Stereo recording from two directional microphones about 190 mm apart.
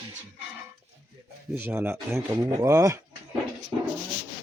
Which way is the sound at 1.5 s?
10° right (ahead or behind).